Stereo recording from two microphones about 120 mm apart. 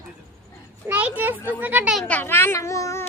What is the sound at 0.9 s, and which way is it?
A child's voice, 10° right (ahead or behind).